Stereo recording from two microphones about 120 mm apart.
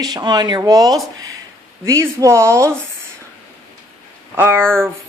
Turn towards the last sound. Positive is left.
turn(degrees=-20)  # may be behind; listen again after turning